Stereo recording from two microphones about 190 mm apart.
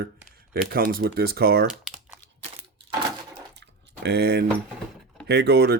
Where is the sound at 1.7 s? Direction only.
5° right (ahead or behind).